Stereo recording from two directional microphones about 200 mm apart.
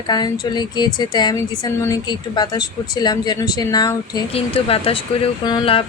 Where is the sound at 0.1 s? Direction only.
20° left (ahead or behind).